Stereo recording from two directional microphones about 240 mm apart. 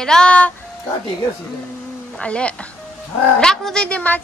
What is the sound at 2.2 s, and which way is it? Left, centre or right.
A woman's voice, centre.